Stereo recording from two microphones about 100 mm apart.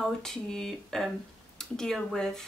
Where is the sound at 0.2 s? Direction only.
5° left (ahead or behind).